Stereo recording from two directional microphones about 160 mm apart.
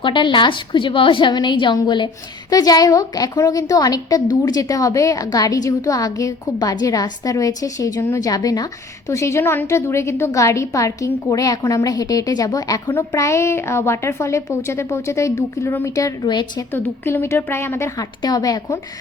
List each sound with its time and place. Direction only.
0.0 s a woman's voice: 30° left (ahead or behind)
16.7 s a woman's voice: 15° left (ahead or behind)